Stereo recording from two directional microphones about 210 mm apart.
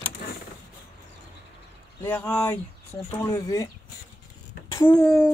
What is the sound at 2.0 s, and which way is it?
Speech, 10° left (ahead or behind).